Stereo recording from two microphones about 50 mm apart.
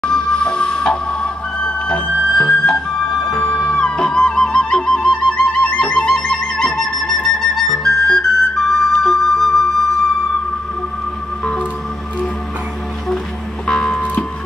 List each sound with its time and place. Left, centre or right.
0.0 s music: centre
5.9 s flute: centre
13.7 s music: centre